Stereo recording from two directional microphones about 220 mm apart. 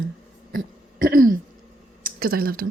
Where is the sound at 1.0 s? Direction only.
40° right (ahead or behind).